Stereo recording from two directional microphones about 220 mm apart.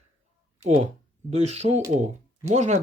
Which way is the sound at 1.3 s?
30° right (ahead or behind).